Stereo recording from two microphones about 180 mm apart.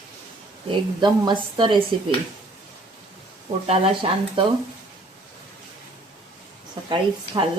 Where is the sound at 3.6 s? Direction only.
30° right (ahead or behind).